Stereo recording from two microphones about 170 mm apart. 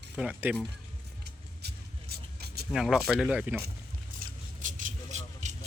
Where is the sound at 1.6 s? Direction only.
70° right (ahead or behind).